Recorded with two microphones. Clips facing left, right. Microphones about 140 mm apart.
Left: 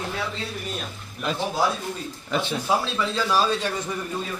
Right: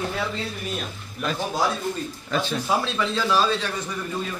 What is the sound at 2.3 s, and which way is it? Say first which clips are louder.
Speech: even; 20° left (ahead or behind).